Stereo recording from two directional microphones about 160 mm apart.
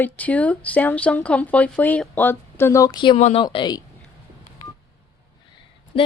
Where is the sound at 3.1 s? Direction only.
45° left (ahead or behind).